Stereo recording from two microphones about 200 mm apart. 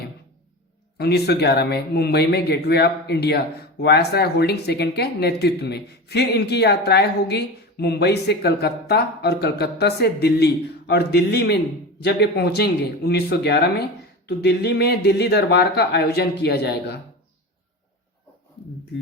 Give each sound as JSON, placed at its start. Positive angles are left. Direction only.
{"t": 0.9, "sound": "speech", "side_deg": 55}